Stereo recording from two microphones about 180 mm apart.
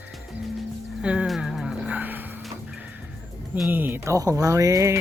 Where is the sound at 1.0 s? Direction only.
5° right (ahead or behind).